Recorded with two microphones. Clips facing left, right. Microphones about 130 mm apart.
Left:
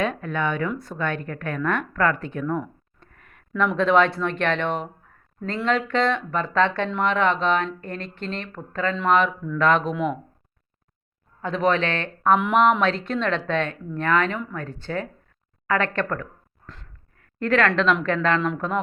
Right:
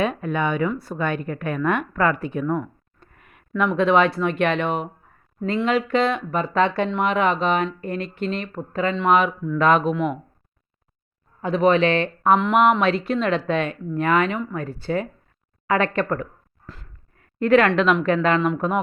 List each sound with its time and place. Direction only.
0.0 s speech: 10° right (ahead or behind)
2.6 s a sound: 5° right (ahead or behind)
3.7 s speech: 5° right (ahead or behind)
11.4 s speech: 10° right (ahead or behind)
15.6 s a sound: 15° right (ahead or behind)
17.2 s a woman's voice: 15° right (ahead or behind)